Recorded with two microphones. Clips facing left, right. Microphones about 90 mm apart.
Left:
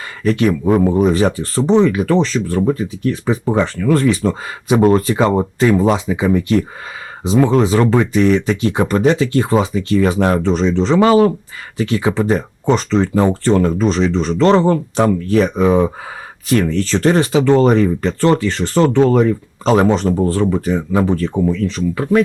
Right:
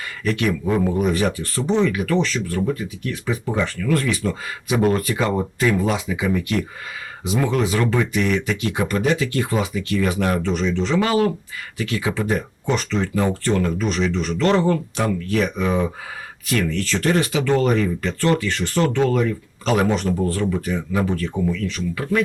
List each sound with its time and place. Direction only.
0.3 s speech: 35° left (ahead or behind)